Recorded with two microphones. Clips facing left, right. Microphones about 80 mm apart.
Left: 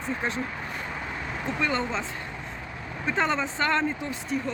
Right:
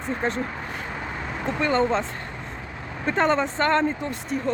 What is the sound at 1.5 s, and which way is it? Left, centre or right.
Speech, right.